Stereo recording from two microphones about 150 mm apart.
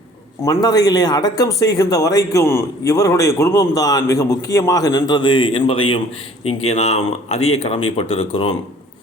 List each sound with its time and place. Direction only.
0.4 s speech: 25° left (ahead or behind); by 8.5 s 40° left (ahead or behind)